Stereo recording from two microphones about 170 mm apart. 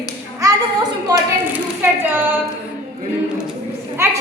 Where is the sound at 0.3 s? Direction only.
20° right (ahead or behind).